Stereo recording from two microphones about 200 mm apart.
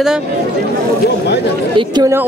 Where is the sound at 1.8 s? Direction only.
20° right (ahead or behind).